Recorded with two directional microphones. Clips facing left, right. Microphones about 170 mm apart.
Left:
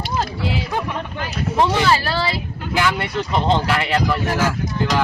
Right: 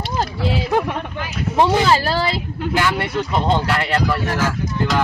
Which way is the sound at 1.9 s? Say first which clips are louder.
Right 2 dB; 40° right (ahead or behind).